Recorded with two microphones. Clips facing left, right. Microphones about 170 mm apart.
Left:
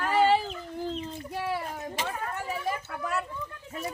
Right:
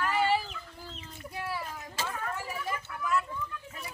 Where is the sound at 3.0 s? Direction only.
40° left (ahead or behind).